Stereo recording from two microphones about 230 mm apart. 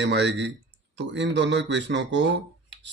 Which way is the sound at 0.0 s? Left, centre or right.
Right.